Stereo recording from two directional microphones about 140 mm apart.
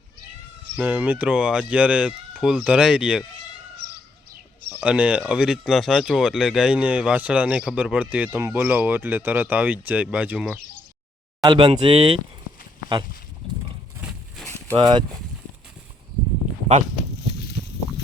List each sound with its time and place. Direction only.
0.8 s speech: 10° right (ahead or behind)
4.8 s speech: 10° right (ahead or behind)
11.4 s speech: 30° right (ahead or behind)
14.8 s speech: 35° right (ahead or behind)